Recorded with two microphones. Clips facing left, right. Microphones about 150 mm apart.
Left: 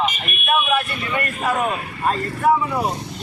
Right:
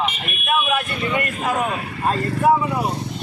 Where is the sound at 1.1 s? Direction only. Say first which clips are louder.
Left 1 dB; 15° right (ahead or behind).